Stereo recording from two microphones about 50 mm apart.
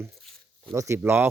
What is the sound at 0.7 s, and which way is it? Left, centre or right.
Speech, right.